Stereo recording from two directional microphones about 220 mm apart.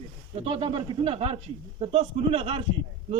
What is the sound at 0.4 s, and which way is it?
Speech, 25° right (ahead or behind).